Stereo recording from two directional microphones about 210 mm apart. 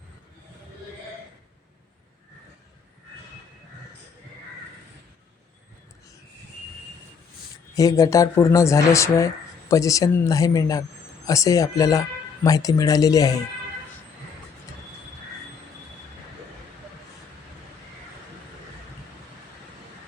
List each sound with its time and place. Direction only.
7.8 s speech: 15° left (ahead or behind)